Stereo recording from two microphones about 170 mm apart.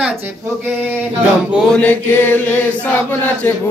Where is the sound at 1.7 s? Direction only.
10° left (ahead or behind).